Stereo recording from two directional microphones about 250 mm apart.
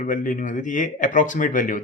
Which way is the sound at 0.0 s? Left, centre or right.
Left.